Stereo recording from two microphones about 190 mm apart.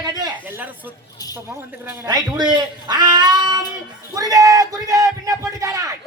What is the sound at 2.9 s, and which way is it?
Cat, 20° right (ahead or behind).